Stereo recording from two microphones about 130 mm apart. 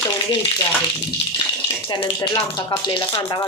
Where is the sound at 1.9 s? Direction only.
35° left (ahead or behind).